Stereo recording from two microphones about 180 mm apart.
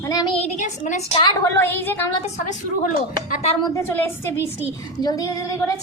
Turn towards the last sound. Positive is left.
turn(degrees=20)  # may be behind; listen again after turning